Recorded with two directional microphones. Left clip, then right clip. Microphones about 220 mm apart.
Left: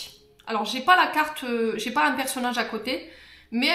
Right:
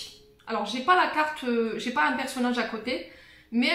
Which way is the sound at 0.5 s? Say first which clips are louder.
Left 4 dB; 50° left (ahead or behind).